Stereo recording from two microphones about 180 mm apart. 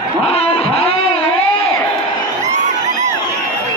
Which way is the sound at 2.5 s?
40° right (ahead or behind).